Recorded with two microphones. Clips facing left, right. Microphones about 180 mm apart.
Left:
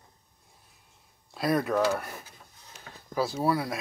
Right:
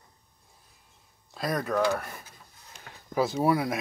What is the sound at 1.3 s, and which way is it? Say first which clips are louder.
Speech: left 2 dB; 5° left (ahead or behind).